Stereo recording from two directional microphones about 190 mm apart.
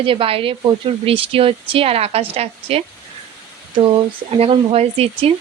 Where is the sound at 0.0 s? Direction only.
30° right (ahead or behind).